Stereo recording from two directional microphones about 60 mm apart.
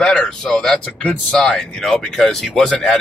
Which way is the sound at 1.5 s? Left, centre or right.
Centre.